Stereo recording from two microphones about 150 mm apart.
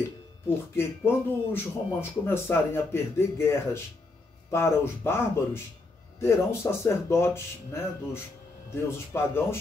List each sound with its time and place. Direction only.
0.7 s speech: 15° left (ahead or behind)